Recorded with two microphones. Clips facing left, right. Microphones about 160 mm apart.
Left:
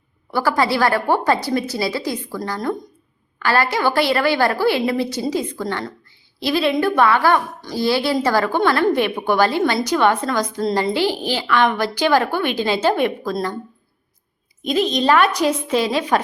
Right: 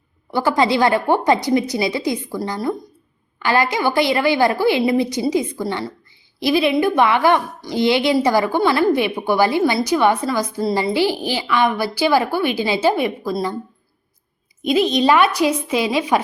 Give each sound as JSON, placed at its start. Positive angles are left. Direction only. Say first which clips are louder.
{"t": 0.3, "sound": "a woman's voice", "louder": "right 2 dB", "side_deg": -20}
{"t": 14.6, "sound": "a woman's voice", "louder": "right 2 dB", "side_deg": -10}